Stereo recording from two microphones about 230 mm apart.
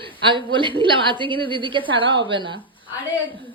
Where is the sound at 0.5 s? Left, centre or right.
Right.